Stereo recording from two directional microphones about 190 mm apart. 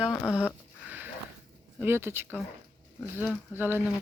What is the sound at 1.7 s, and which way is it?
Speech, 10° right (ahead or behind).